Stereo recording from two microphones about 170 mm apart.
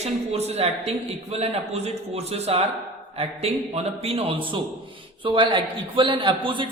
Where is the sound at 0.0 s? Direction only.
40° right (ahead or behind).